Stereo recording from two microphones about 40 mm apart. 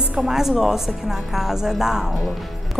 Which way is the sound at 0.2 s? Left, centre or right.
Centre.